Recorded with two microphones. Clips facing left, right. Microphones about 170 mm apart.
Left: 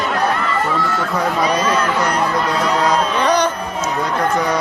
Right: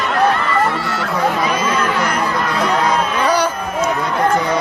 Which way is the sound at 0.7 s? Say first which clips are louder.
Left 2 dB; 75° right (ahead or behind).